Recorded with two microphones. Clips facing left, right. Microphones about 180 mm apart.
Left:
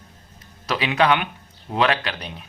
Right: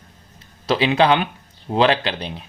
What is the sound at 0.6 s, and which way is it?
A man's voice, 30° right (ahead or behind).